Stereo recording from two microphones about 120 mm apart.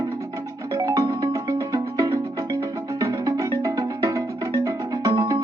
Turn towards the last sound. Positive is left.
turn(degrees=-30)  # may be behind; listen again after turning